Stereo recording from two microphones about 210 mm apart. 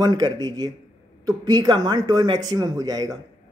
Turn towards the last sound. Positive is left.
turn(degrees=-15)  # may be behind; listen again after turning